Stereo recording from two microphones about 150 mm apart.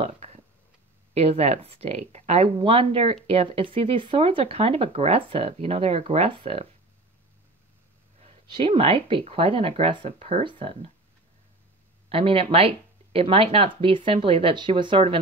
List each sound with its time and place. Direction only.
0.0 s a sound: 45° right (ahead or behind)
1.1 s speech: 45° right (ahead or behind)
8.5 s speech: 35° right (ahead or behind)
12.1 s speech: 40° right (ahead or behind)